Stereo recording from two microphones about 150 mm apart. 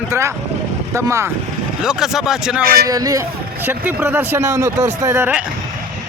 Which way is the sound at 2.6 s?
85° right.